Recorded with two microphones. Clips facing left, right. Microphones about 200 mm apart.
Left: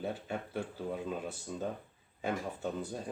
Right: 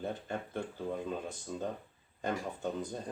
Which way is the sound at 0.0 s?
10° left (ahead or behind).